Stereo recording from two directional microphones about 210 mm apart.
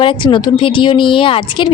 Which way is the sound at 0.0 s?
25° left (ahead or behind).